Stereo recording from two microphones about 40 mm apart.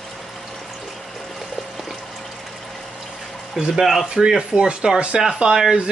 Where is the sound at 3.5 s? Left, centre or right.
Centre.